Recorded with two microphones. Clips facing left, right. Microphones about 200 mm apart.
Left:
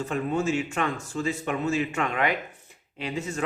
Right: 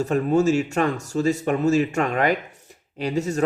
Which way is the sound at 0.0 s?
40° right (ahead or behind).